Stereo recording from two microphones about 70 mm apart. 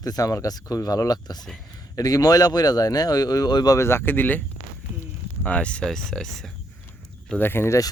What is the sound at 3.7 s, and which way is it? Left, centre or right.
Speech, left.